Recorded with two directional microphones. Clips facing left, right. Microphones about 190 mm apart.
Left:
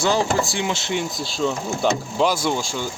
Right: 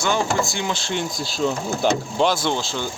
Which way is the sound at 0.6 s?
20° left (ahead or behind).